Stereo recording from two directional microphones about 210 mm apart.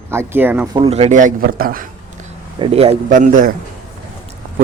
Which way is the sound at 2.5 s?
25° right (ahead or behind).